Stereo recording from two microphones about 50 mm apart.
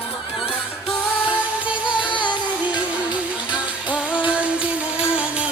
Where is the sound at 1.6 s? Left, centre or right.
Right.